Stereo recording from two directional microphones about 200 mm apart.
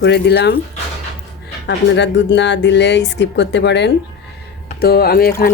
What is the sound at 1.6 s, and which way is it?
Speech, 60° left (ahead or behind).